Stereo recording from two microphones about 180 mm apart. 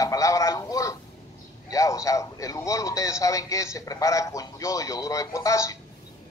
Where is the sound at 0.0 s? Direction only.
20° left (ahead or behind).